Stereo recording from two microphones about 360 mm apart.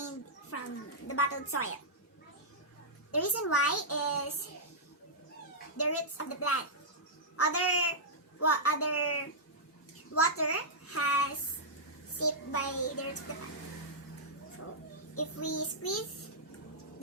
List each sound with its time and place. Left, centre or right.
0.5 s a sound: left
3.1 s a child's voice: left
5.7 s a child's voice: left
15.1 s a child's voice: left